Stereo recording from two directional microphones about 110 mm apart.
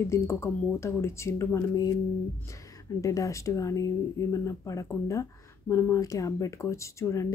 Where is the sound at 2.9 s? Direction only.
30° left (ahead or behind).